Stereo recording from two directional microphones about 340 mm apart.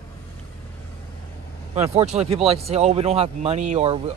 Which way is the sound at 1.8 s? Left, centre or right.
Centre.